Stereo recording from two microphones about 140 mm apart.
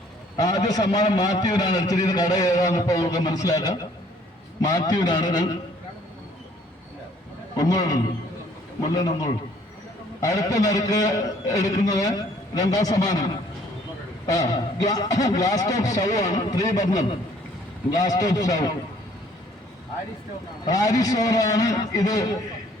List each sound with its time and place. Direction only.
0.3 s a man's voice: 25° left (ahead or behind)
7.5 s a man's voice: 25° left (ahead or behind)
20.7 s a man's voice: 25° left (ahead or behind)